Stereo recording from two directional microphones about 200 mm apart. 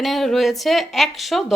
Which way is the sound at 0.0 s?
Centre (ahead or behind).